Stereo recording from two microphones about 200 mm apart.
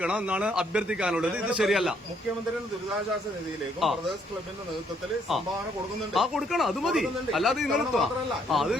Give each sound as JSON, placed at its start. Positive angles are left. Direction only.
{"t": 0.0, "sound": "speech", "side_deg": -5}
{"t": 3.8, "sound": "speech", "side_deg": 0}
{"t": 6.1, "sound": "speech", "side_deg": 0}